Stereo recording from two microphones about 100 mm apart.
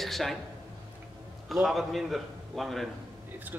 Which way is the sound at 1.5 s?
Centre (ahead or behind).